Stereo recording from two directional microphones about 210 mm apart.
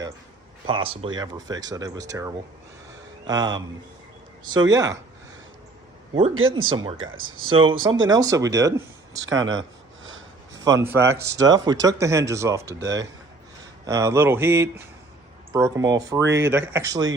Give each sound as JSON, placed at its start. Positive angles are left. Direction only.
{"t": 0.7, "sound": "a man's voice", "side_deg": -25}
{"t": 6.3, "sound": "speech", "side_deg": -75}
{"t": 6.7, "sound": "a man's voice", "side_deg": -20}
{"t": 7.0, "sound": "speech", "side_deg": -75}
{"t": 7.5, "sound": "a man's voice", "side_deg": -25}
{"t": 9.2, "sound": "a sound", "side_deg": -65}
{"t": 10.5, "sound": "speech", "side_deg": -15}
{"t": 12.8, "sound": "speech", "side_deg": -60}
{"t": 13.8, "sound": "speech", "side_deg": -15}